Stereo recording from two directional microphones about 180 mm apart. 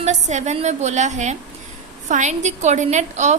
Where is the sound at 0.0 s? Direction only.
40° right (ahead or behind).